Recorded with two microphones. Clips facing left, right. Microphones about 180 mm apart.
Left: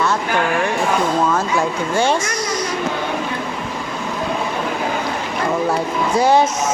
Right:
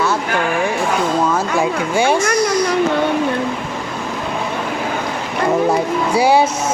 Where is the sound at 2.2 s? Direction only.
60° right (ahead or behind).